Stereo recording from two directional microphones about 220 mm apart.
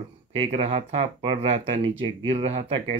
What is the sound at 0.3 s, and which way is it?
Speech, 30° right (ahead or behind).